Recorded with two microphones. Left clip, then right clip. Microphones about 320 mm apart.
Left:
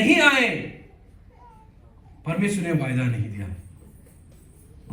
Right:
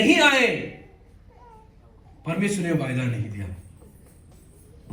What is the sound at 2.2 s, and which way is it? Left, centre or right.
A man's voice, centre.